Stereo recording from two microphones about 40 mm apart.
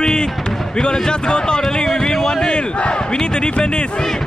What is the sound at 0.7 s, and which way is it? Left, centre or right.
Speech, centre.